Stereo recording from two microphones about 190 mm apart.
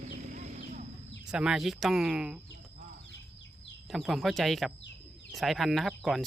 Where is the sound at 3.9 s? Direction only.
Centre (ahead or behind).